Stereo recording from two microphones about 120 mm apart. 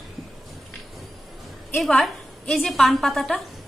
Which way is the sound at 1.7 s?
Centre (ahead or behind).